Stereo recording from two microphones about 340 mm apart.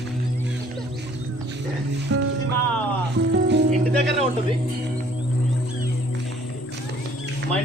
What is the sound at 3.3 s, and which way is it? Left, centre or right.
Music, right.